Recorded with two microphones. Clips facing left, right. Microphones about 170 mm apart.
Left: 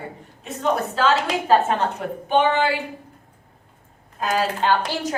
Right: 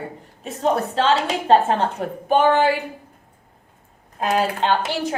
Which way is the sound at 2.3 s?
45° right (ahead or behind).